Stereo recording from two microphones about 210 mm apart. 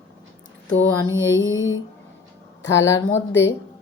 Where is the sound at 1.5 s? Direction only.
65° left (ahead or behind).